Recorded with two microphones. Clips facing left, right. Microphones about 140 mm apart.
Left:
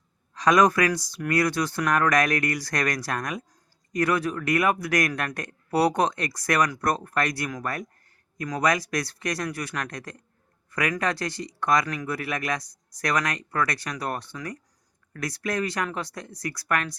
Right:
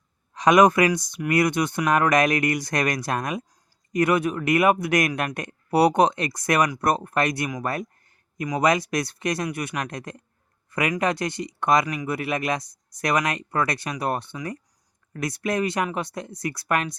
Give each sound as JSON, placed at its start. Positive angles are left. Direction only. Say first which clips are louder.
{"t": 0.3, "sound": "a man's voice", "louder": "right 3 dB", "side_deg": -20}